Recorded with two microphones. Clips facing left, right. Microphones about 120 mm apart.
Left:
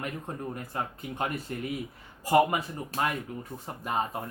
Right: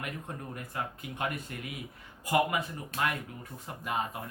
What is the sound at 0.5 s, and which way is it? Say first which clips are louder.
Speech: left 3 dB; 30° left (ahead or behind).